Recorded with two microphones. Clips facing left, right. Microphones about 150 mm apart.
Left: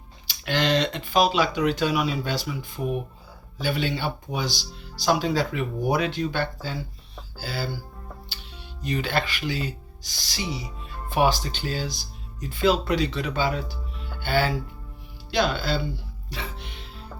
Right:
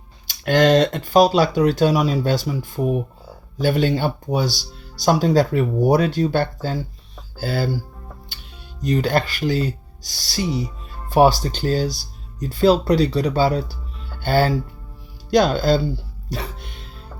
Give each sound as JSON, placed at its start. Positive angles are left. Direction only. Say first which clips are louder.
{"t": 0.3, "sound": "speech", "louder": "right 9 dB", "side_deg": -45}
{"t": 8.8, "sound": "speech", "louder": "right 7 dB", "side_deg": -40}